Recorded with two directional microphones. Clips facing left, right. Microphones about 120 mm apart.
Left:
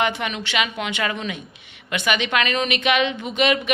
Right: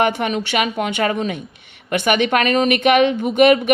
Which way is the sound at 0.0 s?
45° right (ahead or behind).